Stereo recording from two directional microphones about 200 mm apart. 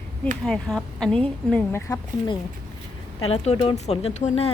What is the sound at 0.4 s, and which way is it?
A woman's voice, centre (ahead or behind).